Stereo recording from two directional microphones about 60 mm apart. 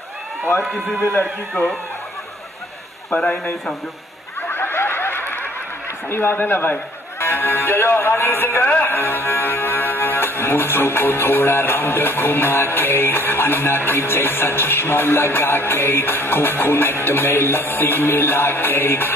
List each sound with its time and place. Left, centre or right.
1.5 s music: left
4.4 s snicker: left
6.0 s music: left
8.6 s music: left
8.9 s music: left